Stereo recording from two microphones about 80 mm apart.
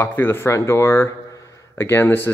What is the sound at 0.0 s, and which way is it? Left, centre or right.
Speech, left.